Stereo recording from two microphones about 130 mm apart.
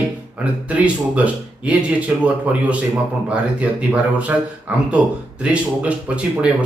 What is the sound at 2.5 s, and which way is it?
Speech, 10° right (ahead or behind).